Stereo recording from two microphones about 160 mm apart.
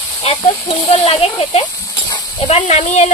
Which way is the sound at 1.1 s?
40° left (ahead or behind).